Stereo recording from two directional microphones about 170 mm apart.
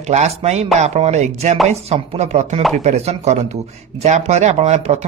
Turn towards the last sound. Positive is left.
turn(degrees=-40)  # may be behind; listen again after turning